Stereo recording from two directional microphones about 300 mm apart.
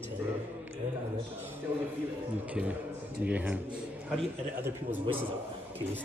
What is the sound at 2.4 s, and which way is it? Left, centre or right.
Speech, centre.